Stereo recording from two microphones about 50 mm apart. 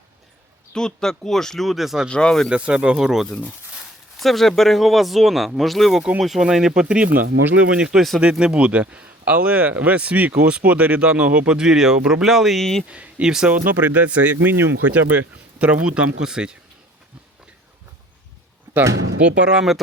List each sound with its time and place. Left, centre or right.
0.7 s speech: centre
2.0 s speech: centre
2.5 s speech: right
4.2 s speech: centre
6.8 s speech: right
7.1 s speech: right
7.5 s speech: right
7.9 s speech: centre
8.2 s speech: centre
11.5 s speech: centre
12.9 s speech: right
13.2 s speech: centre
13.7 s speech: right; by 16.6 s centre
19.2 s speech: centre